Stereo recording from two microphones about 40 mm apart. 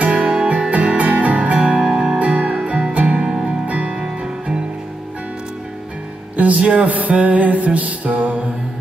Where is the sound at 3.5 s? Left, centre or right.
Right.